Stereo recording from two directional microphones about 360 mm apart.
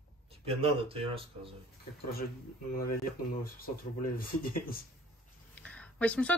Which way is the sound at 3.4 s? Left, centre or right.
Left.